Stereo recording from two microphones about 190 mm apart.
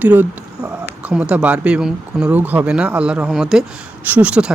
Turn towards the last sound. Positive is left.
turn(degrees=-5)  # may be behind; listen again after turning